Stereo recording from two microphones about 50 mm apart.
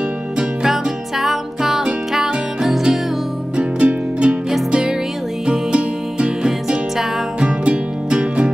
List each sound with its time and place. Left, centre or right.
0.7 s music: centre
3.5 s music: right